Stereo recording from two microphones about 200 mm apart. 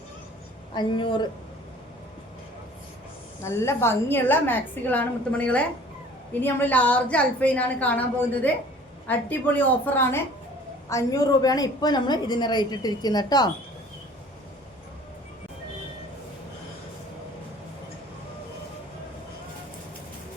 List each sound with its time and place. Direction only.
0.7 s a woman's voice: 25° left (ahead or behind)
3.4 s a woman's voice: 15° left (ahead or behind)